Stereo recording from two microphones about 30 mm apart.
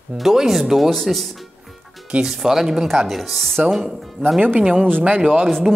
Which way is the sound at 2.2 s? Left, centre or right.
Centre.